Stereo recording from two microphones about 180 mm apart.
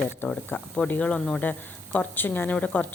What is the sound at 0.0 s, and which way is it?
Speech, 5° left (ahead or behind).